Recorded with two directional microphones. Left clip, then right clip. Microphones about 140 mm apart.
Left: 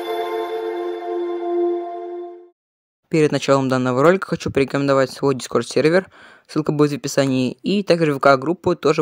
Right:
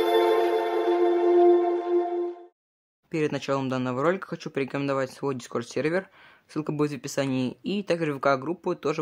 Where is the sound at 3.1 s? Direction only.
55° left (ahead or behind).